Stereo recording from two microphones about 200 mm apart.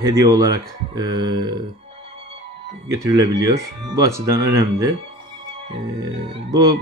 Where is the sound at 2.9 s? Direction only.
15° right (ahead or behind).